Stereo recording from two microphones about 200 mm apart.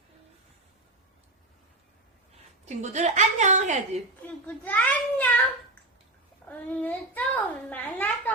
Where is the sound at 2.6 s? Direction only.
35° right (ahead or behind).